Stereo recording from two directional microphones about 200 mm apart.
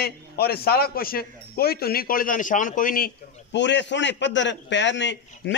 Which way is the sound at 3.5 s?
60° left (ahead or behind).